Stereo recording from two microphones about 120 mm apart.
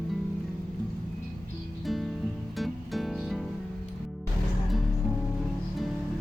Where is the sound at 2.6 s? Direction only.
Centre (ahead or behind).